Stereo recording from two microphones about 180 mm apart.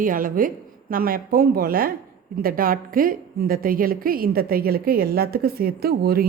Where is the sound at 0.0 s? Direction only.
50° right (ahead or behind).